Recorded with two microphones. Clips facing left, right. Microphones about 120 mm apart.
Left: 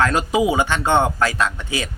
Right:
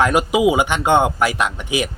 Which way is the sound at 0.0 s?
15° right (ahead or behind).